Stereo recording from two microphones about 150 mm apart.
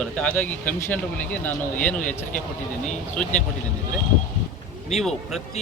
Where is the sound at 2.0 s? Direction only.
60° left (ahead or behind).